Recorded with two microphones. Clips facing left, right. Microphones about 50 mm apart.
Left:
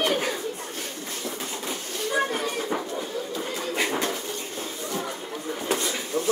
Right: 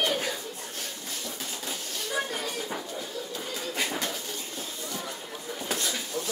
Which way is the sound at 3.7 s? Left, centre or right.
Left.